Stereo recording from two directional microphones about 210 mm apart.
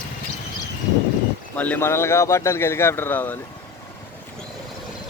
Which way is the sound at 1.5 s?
5° left (ahead or behind).